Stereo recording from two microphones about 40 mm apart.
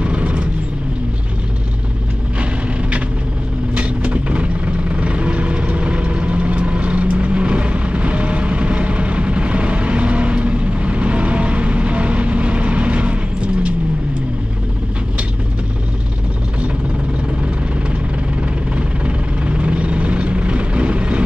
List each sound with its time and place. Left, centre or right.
0.0 s vehicle: right
3.7 s vehicle: right
18.8 s vehicle: right